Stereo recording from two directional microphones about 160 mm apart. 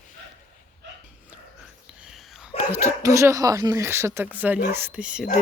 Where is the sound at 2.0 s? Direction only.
Centre (ahead or behind).